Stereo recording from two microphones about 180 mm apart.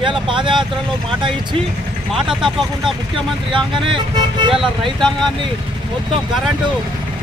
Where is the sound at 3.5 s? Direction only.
30° right (ahead or behind).